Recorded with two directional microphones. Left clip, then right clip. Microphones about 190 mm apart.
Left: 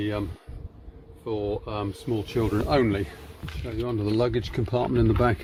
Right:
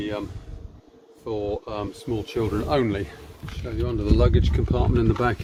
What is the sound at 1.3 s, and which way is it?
Speech, 45° left (ahead or behind).